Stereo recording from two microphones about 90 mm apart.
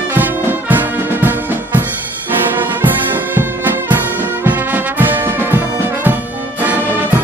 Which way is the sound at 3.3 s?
20° right (ahead or behind).